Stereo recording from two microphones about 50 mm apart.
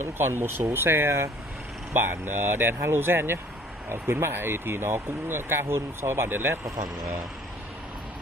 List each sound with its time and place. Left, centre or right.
0.2 s speech: right